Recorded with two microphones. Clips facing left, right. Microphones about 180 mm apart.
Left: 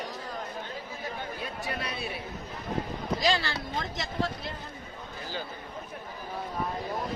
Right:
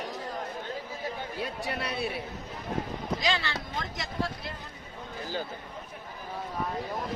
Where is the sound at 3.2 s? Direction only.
35° left (ahead or behind).